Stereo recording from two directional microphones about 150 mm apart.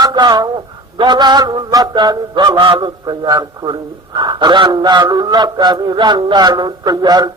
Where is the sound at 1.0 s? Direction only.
30° right (ahead or behind).